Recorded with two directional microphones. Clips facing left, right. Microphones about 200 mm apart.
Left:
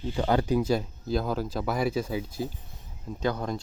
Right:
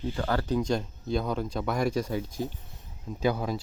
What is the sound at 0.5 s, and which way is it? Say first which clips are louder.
Speech: left 2 dB; 5° left (ahead or behind).